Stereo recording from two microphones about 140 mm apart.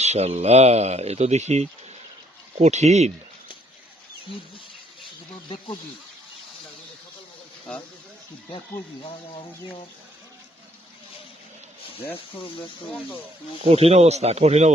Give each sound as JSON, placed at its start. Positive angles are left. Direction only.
{"t": 0.0, "sound": "speech", "side_deg": -50}
{"t": 12.1, "sound": "speech", "side_deg": 35}
{"t": 13.6, "sound": "speech", "side_deg": -45}